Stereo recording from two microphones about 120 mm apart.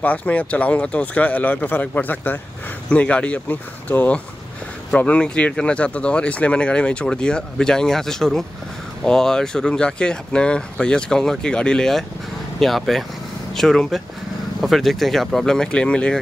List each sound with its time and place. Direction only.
0.0 s speech: 10° left (ahead or behind)